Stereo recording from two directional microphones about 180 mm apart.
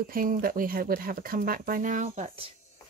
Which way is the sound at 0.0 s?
50° right (ahead or behind).